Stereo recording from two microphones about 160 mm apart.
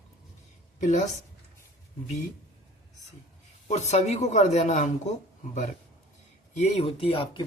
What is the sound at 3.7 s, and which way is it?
Speech, 45° left (ahead or behind).